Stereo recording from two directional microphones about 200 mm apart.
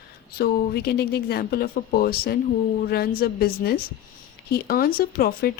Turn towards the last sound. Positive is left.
turn(degrees=50)  # may be behind; listen again after turning